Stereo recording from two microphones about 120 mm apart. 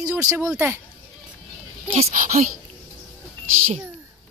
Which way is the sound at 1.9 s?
80° right.